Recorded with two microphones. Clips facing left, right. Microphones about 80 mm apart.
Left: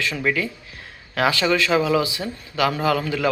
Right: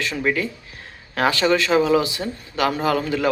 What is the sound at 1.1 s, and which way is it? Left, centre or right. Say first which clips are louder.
Speech: right 1 dB; right.